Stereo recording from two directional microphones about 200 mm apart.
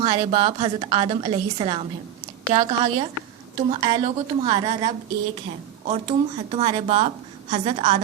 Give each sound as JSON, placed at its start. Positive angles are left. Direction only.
{"t": 0.0, "sound": "a woman's voice", "side_deg": -25}